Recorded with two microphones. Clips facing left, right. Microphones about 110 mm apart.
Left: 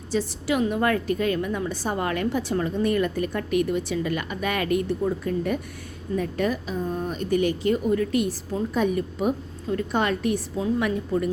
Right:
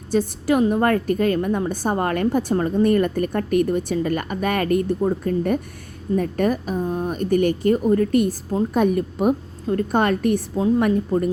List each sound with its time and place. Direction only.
0.1 s a woman's voice: 50° right (ahead or behind)